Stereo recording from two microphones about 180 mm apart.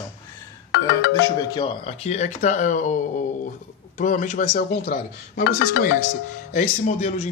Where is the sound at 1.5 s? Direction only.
30° left (ahead or behind); by 4.6 s 45° left (ahead or behind).